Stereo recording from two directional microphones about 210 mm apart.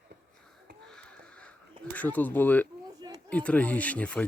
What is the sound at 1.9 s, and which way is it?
Speech, 5° left (ahead or behind).